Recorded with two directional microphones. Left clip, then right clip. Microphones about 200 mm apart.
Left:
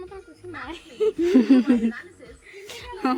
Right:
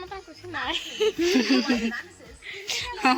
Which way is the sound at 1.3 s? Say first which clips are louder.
Left 4 dB; 40° left (ahead or behind).